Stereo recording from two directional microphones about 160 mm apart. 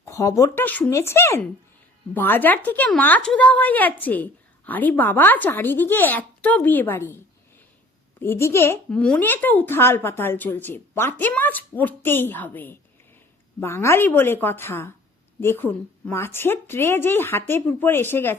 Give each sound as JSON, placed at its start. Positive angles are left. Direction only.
{"t": 0.0, "sound": "a woman's voice", "side_deg": 20}
{"t": 8.2, "sound": "a woman's voice", "side_deg": 15}
{"t": 8.9, "sound": "a woman's voice", "side_deg": 5}